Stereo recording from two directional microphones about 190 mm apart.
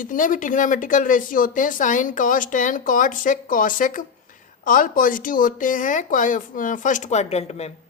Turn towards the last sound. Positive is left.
turn(degrees=35)  # may be behind; listen again after turning